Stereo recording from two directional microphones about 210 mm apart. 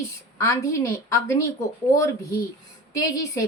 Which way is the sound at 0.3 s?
15° left (ahead or behind).